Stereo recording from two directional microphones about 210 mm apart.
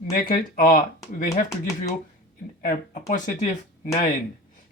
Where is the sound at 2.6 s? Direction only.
35° left (ahead or behind).